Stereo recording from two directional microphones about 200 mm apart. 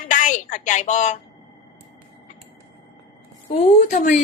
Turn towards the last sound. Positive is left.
turn(degrees=40)  # may be behind; listen again after turning